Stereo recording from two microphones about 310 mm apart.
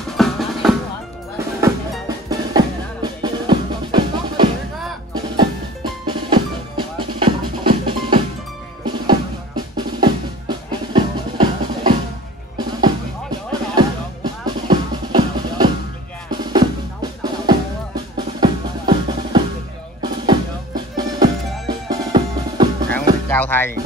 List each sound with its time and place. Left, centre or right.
0.2 s music: centre
1.6 s music: centre
6.0 s music: centre
9.8 s drum: centre
12.5 s music: centre
16.3 s drum: centre
23.2 s music: centre